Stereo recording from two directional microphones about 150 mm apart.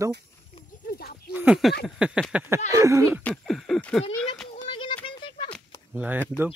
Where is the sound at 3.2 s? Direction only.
Centre (ahead or behind).